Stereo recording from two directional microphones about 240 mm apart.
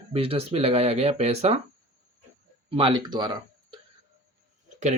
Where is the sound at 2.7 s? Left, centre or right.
Right.